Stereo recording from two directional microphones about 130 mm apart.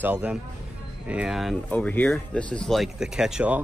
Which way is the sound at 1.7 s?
10° left (ahead or behind).